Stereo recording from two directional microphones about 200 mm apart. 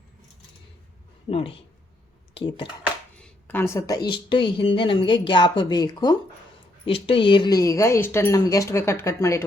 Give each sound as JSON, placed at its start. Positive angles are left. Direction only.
{"t": 1.3, "sound": "speech", "side_deg": 30}
{"t": 3.2, "sound": "speech", "side_deg": 5}